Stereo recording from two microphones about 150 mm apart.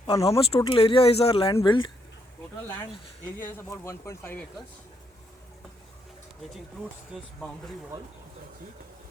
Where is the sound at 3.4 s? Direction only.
15° left (ahead or behind).